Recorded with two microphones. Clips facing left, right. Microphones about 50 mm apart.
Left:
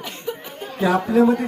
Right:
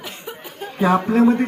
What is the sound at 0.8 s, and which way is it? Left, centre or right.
Speech, right.